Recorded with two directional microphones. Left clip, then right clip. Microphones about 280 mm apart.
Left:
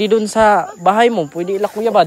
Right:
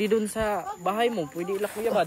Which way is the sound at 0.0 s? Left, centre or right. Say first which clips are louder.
Left 13 dB; centre.